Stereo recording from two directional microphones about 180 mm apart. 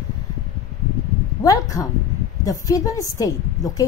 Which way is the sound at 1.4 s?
20° left (ahead or behind).